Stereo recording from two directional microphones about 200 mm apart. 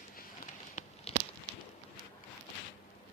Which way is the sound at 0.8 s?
40° left (ahead or behind).